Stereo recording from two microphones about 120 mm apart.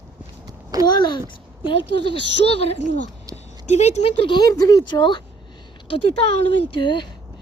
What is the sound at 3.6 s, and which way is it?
Speech, 70° left (ahead or behind).